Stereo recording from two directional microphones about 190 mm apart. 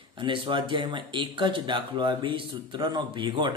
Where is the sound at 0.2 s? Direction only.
25° right (ahead or behind).